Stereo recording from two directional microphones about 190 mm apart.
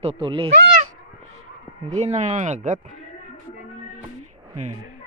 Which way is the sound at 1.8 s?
35° right (ahead or behind).